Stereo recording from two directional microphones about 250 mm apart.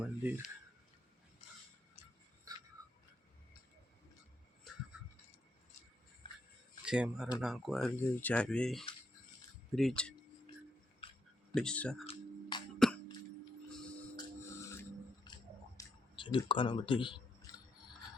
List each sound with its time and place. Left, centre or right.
0.2 s speech: centre
6.8 s speech: centre
11.0 s a sound: left
11.5 s speech: centre
12.0 s music: centre
14.5 s music: centre
15.8 s speech: centre